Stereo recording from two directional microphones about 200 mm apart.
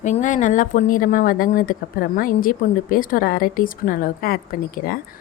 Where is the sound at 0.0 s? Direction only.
40° left (ahead or behind).